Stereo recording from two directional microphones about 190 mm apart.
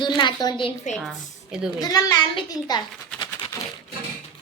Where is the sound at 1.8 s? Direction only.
20° left (ahead or behind).